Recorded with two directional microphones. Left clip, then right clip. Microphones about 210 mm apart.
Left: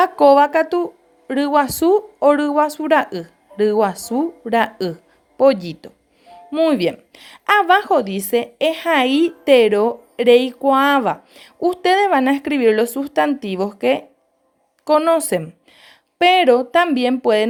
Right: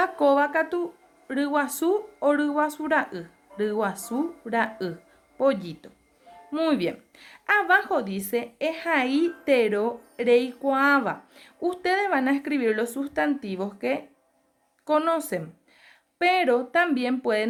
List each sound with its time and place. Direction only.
0.0 s a woman's voice: 30° left (ahead or behind)